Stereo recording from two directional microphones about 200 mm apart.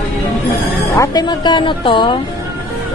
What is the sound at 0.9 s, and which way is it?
A woman's voice, 20° left (ahead or behind).